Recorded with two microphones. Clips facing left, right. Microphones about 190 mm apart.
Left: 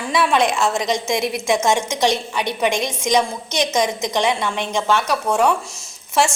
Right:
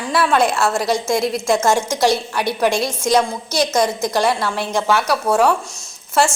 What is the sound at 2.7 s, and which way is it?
A woman's voice, 15° left (ahead or behind).